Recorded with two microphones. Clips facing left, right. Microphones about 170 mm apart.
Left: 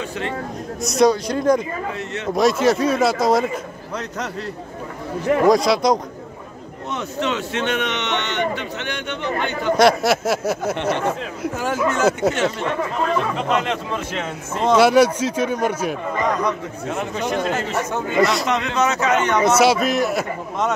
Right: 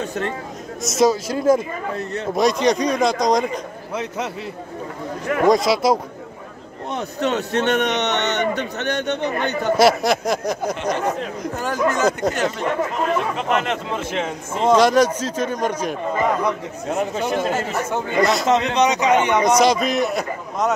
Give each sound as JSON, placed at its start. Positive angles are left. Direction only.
{"t": 0.8, "sound": "speech", "side_deg": 0}
{"t": 5.5, "sound": "speech", "side_deg": 0}
{"t": 6.9, "sound": "a man's voice", "side_deg": -40}
{"t": 9.8, "sound": "speech", "side_deg": 0}
{"t": 10.8, "sound": "a man's voice", "side_deg": -15}
{"t": 11.4, "sound": "speech", "side_deg": 5}
{"t": 14.2, "sound": "a man's voice", "side_deg": -10}
{"t": 14.8, "sound": "speech", "side_deg": 10}
{"t": 16.2, "sound": "a man's voice", "side_deg": -5}
{"t": 18.8, "sound": "a man's voice", "side_deg": -15}
{"t": 19.6, "sound": "speech", "side_deg": 5}